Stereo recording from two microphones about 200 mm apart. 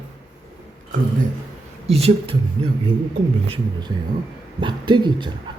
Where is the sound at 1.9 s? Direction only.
30° right (ahead or behind).